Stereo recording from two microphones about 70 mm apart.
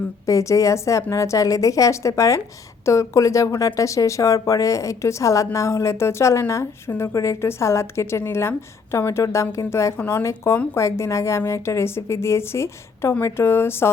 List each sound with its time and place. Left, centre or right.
0.3 s a woman's voice: left
10.0 s speech: left
10.2 s a woman's voice: left